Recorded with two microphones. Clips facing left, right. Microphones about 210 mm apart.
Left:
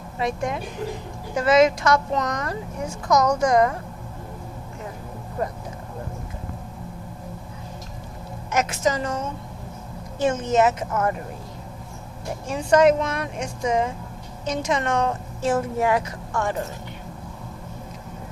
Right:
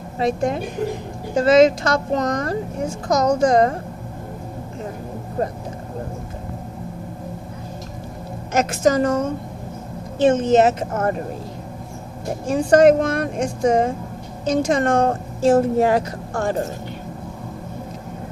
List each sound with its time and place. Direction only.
0.2 s a woman's voice: 35° right (ahead or behind)
5.4 s a woman's voice: 30° right (ahead or behind)
8.7 s a woman's voice: 50° right (ahead or behind)
10.2 s a woman's voice: 30° right (ahead or behind)
10.9 s a woman's voice: 40° right (ahead or behind)
12.5 s a woman's voice: 45° right (ahead or behind)
15.4 s a woman's voice: 30° right (ahead or behind)